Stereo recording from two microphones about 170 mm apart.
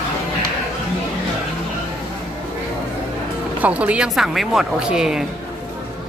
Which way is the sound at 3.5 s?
10° right (ahead or behind).